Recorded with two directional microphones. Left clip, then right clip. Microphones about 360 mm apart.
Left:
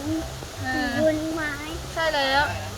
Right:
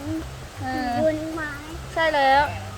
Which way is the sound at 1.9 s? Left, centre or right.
Centre.